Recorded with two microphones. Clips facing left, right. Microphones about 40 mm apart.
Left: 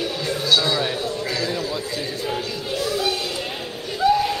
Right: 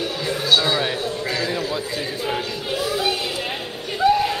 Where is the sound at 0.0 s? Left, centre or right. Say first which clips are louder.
Even; centre.